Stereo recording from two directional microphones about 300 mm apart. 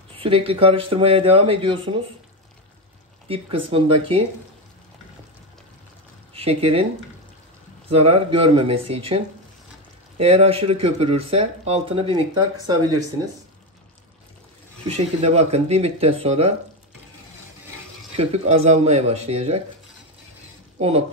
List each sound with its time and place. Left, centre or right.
0.2 s speech: centre
3.3 s speech: centre
6.3 s speech: centre
7.9 s speech: centre
14.9 s speech: right
18.1 s speech: right
20.8 s speech: centre